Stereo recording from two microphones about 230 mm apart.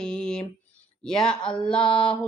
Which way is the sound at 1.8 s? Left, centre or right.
Left.